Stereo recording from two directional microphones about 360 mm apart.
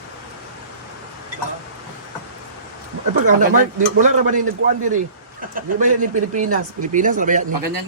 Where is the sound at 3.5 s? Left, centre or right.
Right.